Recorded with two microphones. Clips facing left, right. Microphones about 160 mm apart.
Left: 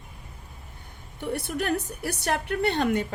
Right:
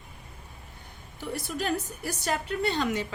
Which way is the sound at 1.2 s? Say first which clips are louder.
Left 3 dB; 60° left (ahead or behind).